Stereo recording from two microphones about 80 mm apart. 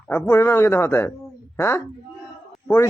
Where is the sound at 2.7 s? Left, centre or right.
Centre.